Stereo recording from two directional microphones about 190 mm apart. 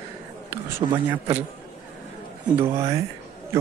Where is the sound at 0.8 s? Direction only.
25° right (ahead or behind).